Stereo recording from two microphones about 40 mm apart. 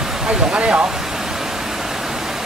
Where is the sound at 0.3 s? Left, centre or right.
Right.